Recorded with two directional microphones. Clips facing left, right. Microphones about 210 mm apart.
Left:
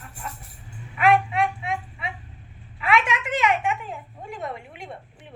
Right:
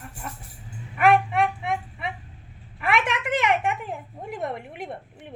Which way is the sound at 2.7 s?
55° right (ahead or behind).